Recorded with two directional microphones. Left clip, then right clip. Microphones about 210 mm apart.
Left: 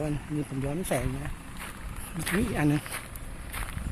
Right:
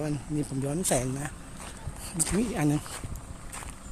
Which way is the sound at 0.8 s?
15° right (ahead or behind).